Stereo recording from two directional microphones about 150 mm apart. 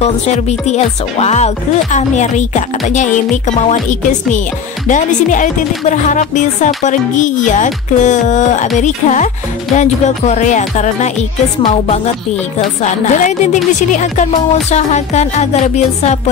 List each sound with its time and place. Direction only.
0.0 s speech: 45° left (ahead or behind)
12.8 s speech: 55° left (ahead or behind)